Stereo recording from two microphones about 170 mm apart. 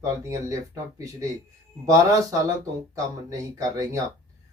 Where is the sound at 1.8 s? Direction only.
20° right (ahead or behind).